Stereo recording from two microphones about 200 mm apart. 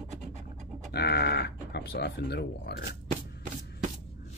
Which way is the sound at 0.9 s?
55° left (ahead or behind).